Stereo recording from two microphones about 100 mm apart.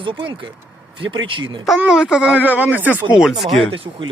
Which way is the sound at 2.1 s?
10° right (ahead or behind).